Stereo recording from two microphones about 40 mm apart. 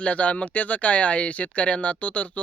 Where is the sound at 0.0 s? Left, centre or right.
Left.